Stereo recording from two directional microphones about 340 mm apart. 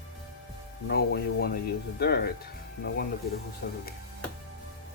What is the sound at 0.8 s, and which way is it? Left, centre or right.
Speech, left.